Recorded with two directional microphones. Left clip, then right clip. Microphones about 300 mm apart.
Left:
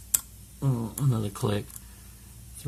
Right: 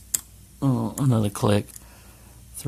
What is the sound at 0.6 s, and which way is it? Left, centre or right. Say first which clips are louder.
Speech: right 7 dB; right.